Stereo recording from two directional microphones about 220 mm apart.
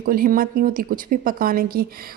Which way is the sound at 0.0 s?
40° right (ahead or behind).